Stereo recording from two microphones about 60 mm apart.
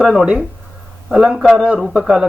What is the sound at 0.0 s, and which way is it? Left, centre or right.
A man's voice, centre.